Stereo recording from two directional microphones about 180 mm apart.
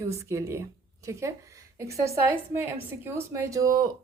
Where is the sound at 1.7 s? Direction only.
15° right (ahead or behind).